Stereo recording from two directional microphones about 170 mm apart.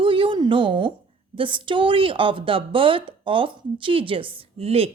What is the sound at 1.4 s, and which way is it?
A woman's voice, 30° right (ahead or behind).